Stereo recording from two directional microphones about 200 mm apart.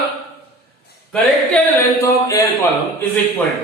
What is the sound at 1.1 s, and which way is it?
Speech, 10° left (ahead or behind).